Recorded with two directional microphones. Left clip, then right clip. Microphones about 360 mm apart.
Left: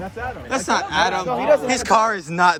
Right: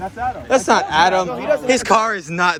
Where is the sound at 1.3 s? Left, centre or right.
Left.